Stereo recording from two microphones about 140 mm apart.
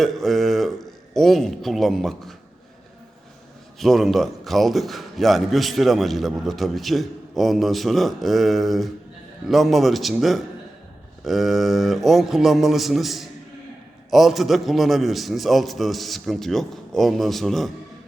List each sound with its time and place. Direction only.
0.0 s speech: centre (ahead or behind)
3.8 s a man's voice: centre (ahead or behind)